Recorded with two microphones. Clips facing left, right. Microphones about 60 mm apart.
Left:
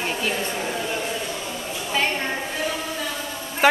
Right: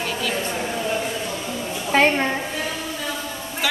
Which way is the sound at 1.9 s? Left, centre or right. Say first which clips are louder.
Right 7 dB; right.